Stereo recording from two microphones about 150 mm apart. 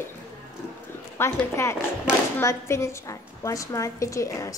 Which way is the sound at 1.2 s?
15° left (ahead or behind).